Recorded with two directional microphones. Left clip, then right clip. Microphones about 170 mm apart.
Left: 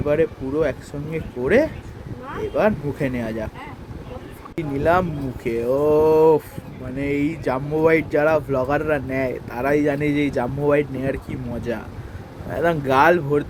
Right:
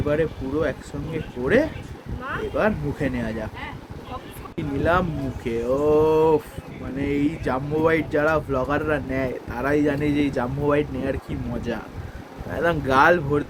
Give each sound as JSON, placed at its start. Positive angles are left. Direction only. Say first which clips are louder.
{"t": 0.1, "sound": "speech", "louder": "left 4 dB", "side_deg": 20}
{"t": 4.5, "sound": "speech", "louder": "left 3 dB", "side_deg": 25}